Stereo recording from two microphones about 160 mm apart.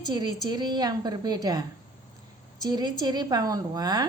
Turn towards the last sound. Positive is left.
turn(degrees=-25)  # may be behind; listen again after turning